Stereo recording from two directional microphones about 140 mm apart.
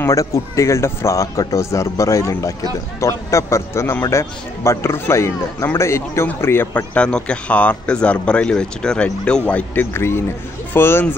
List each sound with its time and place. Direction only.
0.0 s a man's voice: 25° left (ahead or behind)